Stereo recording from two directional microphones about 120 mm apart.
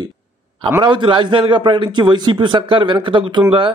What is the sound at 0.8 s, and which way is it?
A man's voice, 40° right (ahead or behind).